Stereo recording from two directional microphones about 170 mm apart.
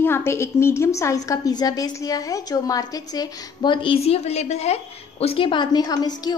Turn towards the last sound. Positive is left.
turn(degrees=25)  # may be behind; listen again after turning